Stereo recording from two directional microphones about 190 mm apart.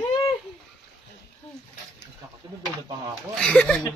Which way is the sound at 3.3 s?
5° left (ahead or behind).